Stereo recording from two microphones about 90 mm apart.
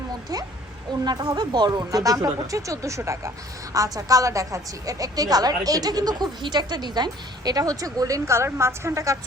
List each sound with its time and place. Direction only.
0.9 s a woman's voice: 55° right (ahead or behind); by 9.1 s 30° right (ahead or behind)